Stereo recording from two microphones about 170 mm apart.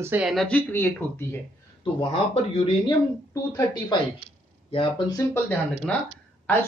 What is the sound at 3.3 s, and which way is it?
A woman's voice, 20° left (ahead or behind).